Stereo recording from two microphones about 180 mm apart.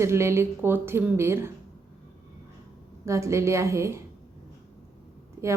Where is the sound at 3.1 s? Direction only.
15° right (ahead or behind).